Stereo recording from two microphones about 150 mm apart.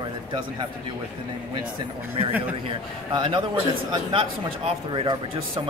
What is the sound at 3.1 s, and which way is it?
Speech, 30° right (ahead or behind).